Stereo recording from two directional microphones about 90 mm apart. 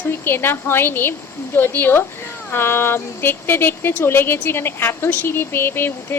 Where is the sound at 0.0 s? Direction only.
25° left (ahead or behind).